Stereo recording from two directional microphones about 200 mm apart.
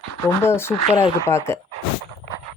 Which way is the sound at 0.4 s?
10° left (ahead or behind).